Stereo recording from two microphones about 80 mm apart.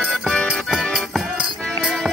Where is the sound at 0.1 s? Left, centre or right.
Centre.